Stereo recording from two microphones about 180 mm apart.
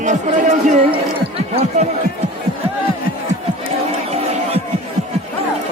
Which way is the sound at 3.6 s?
35° right (ahead or behind).